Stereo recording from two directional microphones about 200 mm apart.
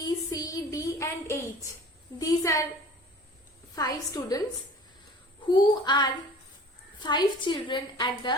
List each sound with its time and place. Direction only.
0.0 s a sound: 20° left (ahead or behind)
2.1 s a woman's voice: 15° left (ahead or behind)
3.8 s a woman's voice: 20° left (ahead or behind)
5.5 s a woman's voice: 20° left (ahead or behind)